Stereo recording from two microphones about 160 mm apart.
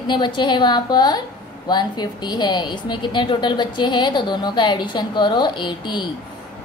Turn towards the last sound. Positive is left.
turn(degrees=30)  # may be behind; listen again after turning